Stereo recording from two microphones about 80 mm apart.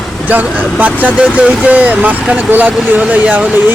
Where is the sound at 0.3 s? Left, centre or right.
Right.